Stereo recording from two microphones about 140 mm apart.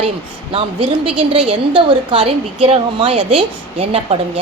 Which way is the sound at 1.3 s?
40° right (ahead or behind).